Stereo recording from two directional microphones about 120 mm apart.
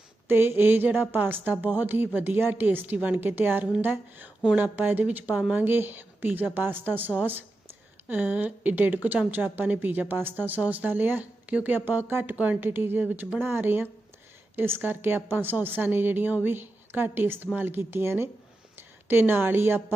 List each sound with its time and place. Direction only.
0.3 s a woman's voice: 20° right (ahead or behind)
5.3 s speech: 5° right (ahead or behind)
5.5 s a woman's voice: 15° right (ahead or behind)